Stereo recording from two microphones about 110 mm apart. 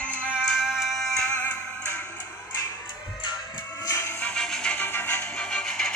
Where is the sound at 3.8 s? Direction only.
30° left (ahead or behind).